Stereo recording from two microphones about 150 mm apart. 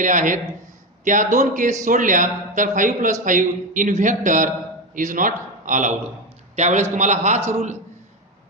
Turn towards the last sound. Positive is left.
turn(degrees=-50)  # may be behind; listen again after turning